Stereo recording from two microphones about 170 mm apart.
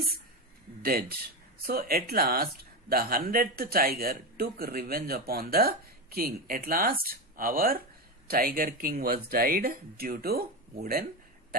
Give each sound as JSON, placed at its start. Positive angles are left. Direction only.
{"t": 0.8, "sound": "speech", "side_deg": -60}